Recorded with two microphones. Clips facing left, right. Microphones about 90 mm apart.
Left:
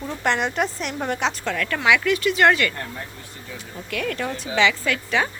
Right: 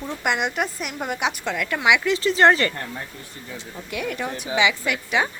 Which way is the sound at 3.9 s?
15° right (ahead or behind).